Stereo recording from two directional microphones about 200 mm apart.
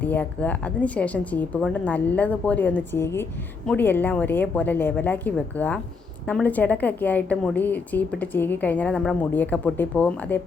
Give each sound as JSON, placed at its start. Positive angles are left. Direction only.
{"t": 0.0, "sound": "a woman's voice", "side_deg": 10}